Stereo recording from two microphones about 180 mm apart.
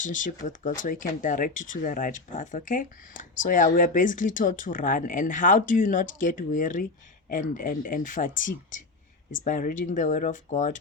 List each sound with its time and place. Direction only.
0.0 s speech: 45° left (ahead or behind)
9.4 s speech: 45° left (ahead or behind)